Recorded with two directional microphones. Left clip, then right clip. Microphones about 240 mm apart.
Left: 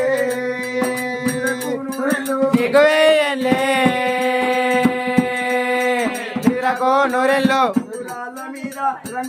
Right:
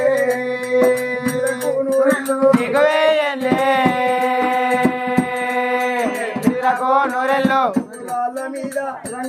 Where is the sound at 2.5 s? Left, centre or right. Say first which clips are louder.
Left 2 dB; centre.